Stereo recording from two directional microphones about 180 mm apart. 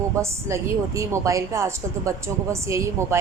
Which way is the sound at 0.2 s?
15° right (ahead or behind).